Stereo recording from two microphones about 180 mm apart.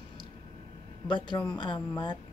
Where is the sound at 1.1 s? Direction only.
25° left (ahead or behind).